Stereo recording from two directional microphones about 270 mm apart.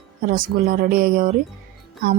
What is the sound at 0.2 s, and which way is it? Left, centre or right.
Speech, right.